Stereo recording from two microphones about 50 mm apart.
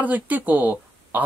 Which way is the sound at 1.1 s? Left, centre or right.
Right.